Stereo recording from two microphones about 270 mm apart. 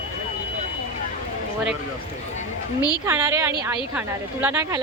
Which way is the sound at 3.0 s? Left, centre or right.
Centre.